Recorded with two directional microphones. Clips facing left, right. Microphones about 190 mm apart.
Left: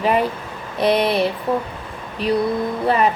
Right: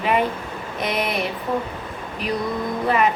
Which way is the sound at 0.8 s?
30° left (ahead or behind).